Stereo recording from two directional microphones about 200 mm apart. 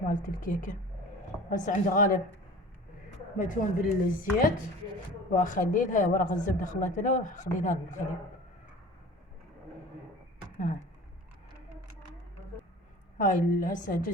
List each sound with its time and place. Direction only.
0.0 s a woman's voice: 40° left (ahead or behind)
3.3 s a woman's voice: 40° left (ahead or behind)
13.1 s a woman's voice: 40° left (ahead or behind)